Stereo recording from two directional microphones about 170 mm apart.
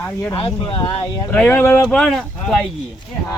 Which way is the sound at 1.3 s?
10° left (ahead or behind).